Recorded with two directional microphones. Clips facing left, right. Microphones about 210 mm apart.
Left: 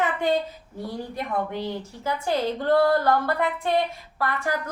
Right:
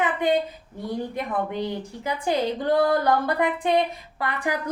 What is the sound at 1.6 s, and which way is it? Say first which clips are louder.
A woman's voice: right 1 dB; 15° right (ahead or behind).